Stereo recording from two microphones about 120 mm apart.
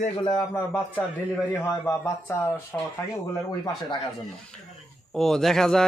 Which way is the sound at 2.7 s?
15° left (ahead or behind).